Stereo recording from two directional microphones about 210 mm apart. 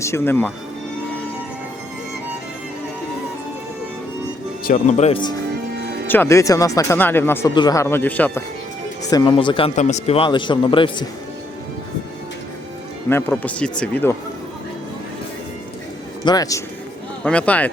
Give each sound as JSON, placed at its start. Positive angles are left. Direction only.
{"t": 0.0, "sound": "speech", "side_deg": 10}
{"t": 4.7, "sound": "speech", "side_deg": 35}
{"t": 5.7, "sound": "music", "side_deg": -50}
{"t": 6.1, "sound": "speech", "side_deg": 10}
{"t": 9.0, "sound": "a man's voice", "side_deg": 20}
{"t": 13.1, "sound": "speech", "side_deg": 10}
{"t": 16.2, "sound": "speech", "side_deg": 20}
{"t": 17.2, "sound": "speech", "side_deg": 5}